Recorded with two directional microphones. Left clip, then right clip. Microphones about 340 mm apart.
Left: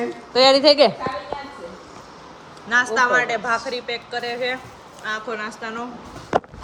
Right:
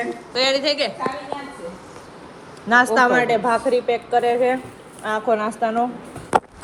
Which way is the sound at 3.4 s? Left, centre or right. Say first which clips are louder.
Right 5 dB; right.